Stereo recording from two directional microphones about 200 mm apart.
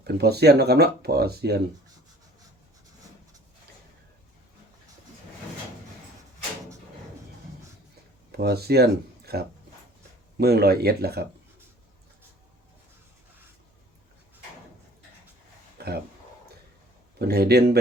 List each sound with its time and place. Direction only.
0.0 s speech: 55° right (ahead or behind)
8.3 s speech: 55° right (ahead or behind)
15.8 s a sound: 55° right (ahead or behind)
17.2 s speech: 50° right (ahead or behind)